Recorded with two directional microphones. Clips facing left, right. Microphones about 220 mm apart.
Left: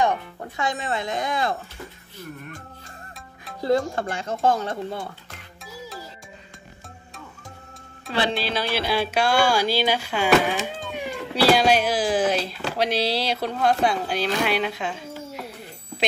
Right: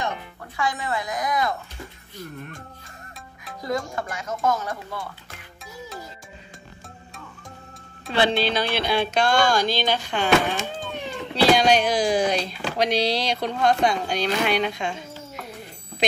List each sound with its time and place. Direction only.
0.6 s speech: 25° left (ahead or behind)
3.6 s speech: 30° left (ahead or behind)
5.6 s music: centre (ahead or behind)
8.1 s speech: centre (ahead or behind)